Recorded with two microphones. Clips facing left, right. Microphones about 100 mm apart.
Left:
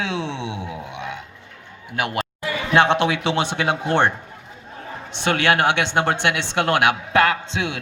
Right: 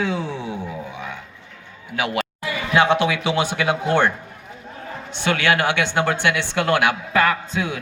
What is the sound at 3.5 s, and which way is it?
Speech, 25° left (ahead or behind).